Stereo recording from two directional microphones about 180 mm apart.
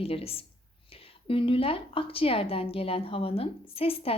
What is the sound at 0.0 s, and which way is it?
A woman's voice, 30° left (ahead or behind).